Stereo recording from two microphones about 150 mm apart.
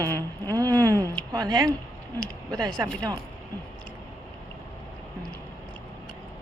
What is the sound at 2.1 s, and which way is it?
Speech, 5° left (ahead or behind).